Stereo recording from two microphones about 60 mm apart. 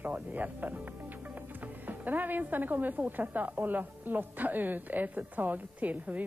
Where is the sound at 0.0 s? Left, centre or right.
Right.